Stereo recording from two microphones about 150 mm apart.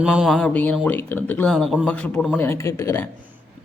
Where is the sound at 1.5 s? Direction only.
Centre (ahead or behind); by 3.1 s 15° left (ahead or behind).